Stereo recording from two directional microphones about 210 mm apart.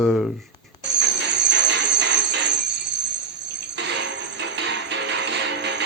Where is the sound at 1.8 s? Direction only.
55° right (ahead or behind).